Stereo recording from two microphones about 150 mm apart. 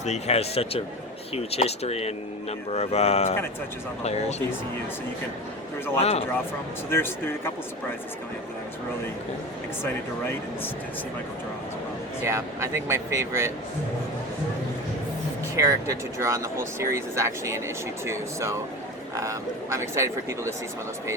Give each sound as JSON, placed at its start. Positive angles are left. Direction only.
{"t": 0.0, "sound": "speech", "side_deg": 45}
{"t": 6.0, "sound": "speech", "side_deg": 40}
{"t": 6.9, "sound": "speech", "side_deg": 15}
{"t": 12.2, "sound": "speech", "side_deg": -20}
{"t": 15.5, "sound": "speech", "side_deg": -20}